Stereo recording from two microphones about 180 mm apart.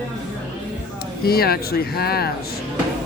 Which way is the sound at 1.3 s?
60° left (ahead or behind).